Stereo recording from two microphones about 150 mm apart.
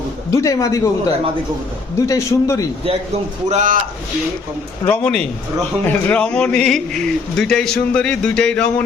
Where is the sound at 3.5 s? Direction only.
50° right (ahead or behind).